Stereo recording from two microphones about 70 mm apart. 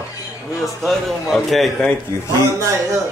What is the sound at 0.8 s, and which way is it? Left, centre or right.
Speech, centre.